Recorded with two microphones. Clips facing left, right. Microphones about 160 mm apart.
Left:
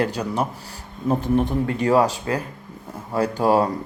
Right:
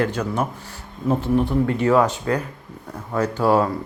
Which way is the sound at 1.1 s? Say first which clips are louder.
Even; 15° left (ahead or behind).